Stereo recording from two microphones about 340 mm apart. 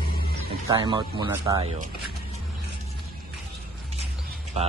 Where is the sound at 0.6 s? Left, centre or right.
Centre.